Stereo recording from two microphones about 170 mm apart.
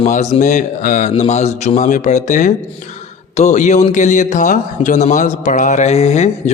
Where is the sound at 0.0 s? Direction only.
45° left (ahead or behind).